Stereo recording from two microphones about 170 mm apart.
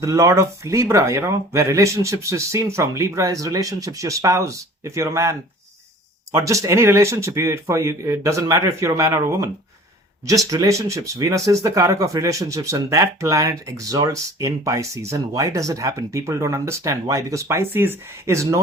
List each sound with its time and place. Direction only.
0.0 s speech: 20° right (ahead or behind)